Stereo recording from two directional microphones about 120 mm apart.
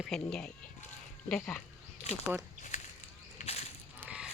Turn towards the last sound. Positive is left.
turn(degrees=-5)  # may be behind; listen again after turning